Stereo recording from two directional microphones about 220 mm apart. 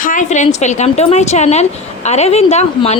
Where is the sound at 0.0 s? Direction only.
35° left (ahead or behind).